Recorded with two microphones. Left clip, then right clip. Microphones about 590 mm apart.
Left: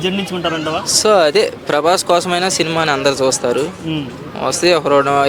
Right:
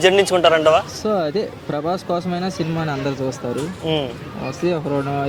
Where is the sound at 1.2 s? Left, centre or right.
Left.